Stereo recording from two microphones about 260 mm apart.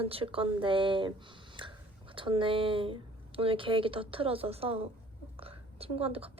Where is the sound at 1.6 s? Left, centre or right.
Centre.